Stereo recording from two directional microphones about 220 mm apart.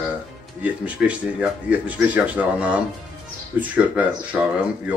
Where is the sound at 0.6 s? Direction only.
5° right (ahead or behind).